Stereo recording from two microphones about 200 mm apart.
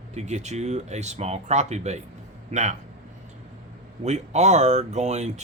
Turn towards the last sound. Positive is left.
turn(degrees=-35)  # may be behind; listen again after turning